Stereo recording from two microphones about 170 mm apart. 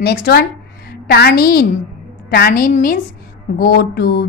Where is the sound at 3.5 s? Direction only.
70° left (ahead or behind).